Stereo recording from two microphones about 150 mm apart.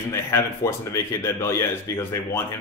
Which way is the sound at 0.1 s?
20° left (ahead or behind).